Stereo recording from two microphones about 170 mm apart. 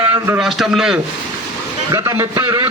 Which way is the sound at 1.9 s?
15° right (ahead or behind).